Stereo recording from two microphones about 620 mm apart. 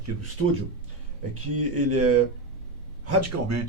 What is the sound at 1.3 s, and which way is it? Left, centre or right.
Speech, right.